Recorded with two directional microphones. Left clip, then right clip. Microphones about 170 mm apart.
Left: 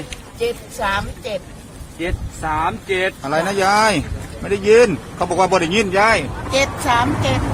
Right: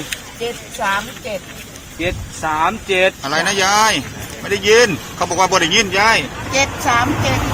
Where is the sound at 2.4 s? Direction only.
45° right (ahead or behind).